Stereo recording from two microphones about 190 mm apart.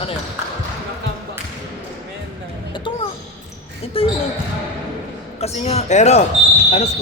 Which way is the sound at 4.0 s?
30° left (ahead or behind).